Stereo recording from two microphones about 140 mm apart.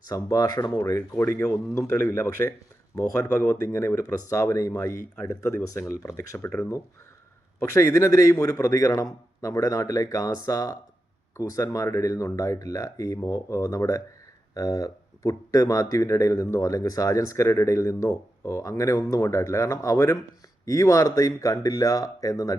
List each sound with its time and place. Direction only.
0.0 s speech: 25° left (ahead or behind)